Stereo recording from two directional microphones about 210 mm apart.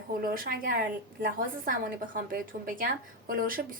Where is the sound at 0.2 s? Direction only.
45° right (ahead or behind).